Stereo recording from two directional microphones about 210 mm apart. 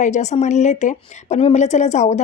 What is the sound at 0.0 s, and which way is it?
A woman's voice, 35° left (ahead or behind).